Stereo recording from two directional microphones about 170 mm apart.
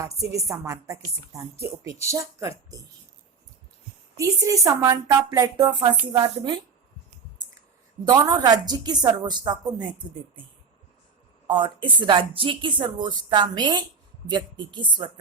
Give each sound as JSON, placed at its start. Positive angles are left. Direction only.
{"t": 0.0, "sound": "speech", "side_deg": -20}
{"t": 4.2, "sound": "speech", "side_deg": -20}
{"t": 8.0, "sound": "speech", "side_deg": -20}
{"t": 11.4, "sound": "speech", "side_deg": -25}